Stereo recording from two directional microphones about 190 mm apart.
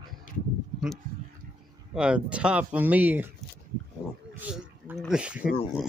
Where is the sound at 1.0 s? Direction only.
50° right (ahead or behind).